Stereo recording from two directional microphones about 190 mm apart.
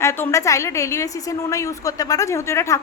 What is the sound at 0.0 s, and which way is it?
A woman's voice, 15° left (ahead or behind).